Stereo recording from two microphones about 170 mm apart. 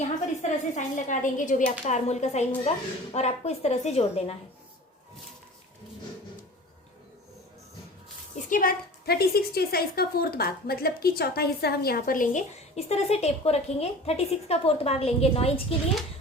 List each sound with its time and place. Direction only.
0.4 s a woman's voice: 45° left (ahead or behind)
8.4 s a woman's voice: 50° left (ahead or behind); by 15.6 s 35° left (ahead or behind)